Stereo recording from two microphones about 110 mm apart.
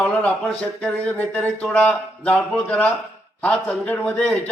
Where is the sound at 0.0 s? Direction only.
15° left (ahead or behind).